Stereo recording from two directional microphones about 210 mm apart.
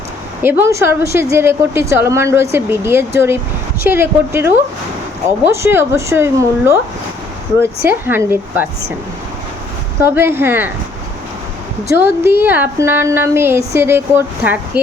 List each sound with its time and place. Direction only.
0.4 s a woman's voice: 10° right (ahead or behind)
7.9 s a woman's voice: 10° right (ahead or behind)
10.0 s a woman's voice: 10° right (ahead or behind)
11.9 s a woman's voice: 10° right (ahead or behind)